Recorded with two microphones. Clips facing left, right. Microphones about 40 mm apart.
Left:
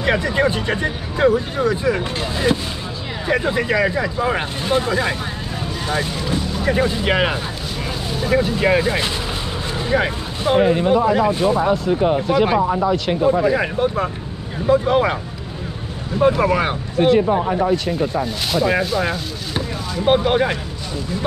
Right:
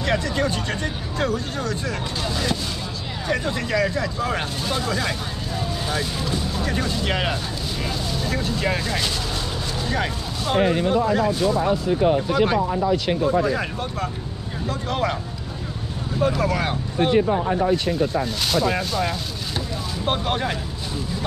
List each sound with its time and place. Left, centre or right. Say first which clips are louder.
0.0 s speech: left 5 dB; left
11.2 s speech: left 4 dB; left
11.9 s speech: left 3 dB; centre
12.9 s speech: left 2 dB; centre
13.2 s speech: left 5 dB; centre
16.2 s speech: left 6 dB; left
17.2 s speech: left 3 dB; centre